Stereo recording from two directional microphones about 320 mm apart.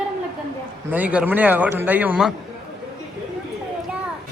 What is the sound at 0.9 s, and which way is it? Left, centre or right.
Speech, centre.